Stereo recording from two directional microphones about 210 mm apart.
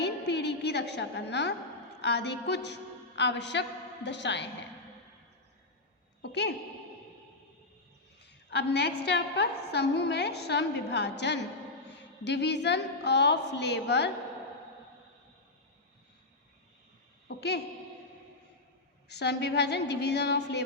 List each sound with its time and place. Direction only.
0.0 s a sound: 55° left (ahead or behind)
2.0 s a woman's voice: 55° left (ahead or behind)
6.2 s a woman's voice: 55° left (ahead or behind)
8.4 s a woman's voice: 50° left (ahead or behind)
17.2 s a woman's voice: 55° left (ahead or behind)
19.0 s a woman's voice: 55° left (ahead or behind)